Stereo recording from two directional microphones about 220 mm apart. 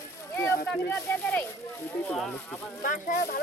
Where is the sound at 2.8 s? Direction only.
40° left (ahead or behind).